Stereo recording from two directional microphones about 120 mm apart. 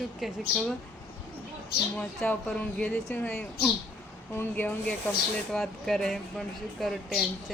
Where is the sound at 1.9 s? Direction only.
10° left (ahead or behind).